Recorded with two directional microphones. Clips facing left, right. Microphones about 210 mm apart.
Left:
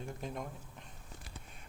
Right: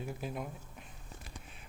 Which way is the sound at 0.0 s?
5° right (ahead or behind).